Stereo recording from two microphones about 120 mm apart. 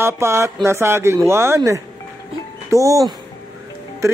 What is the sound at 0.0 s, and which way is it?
Speech, 20° right (ahead or behind).